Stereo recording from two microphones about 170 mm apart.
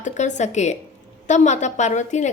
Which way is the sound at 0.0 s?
45° left (ahead or behind).